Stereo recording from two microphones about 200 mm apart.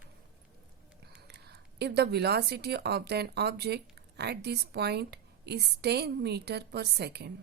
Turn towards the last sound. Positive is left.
turn(degrees=-55)  # may be behind; listen again after turning